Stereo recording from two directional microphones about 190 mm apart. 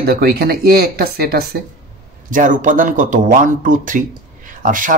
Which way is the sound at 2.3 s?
45° right (ahead or behind).